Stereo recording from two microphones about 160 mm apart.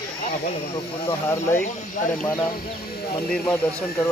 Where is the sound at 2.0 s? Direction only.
50° left (ahead or behind).